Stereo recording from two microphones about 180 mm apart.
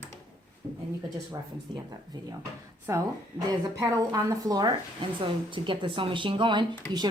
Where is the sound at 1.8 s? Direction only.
20° right (ahead or behind).